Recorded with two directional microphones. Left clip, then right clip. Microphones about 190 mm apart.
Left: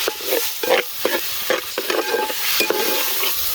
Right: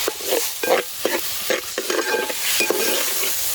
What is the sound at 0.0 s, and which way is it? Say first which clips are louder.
Stir: left 1 dB; 20° left (ahead or behind).